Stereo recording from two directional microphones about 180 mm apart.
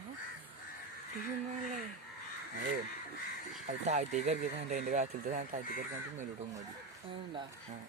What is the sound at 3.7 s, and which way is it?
Speech, 40° right (ahead or behind).